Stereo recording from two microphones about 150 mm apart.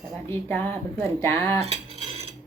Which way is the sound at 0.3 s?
15° left (ahead or behind).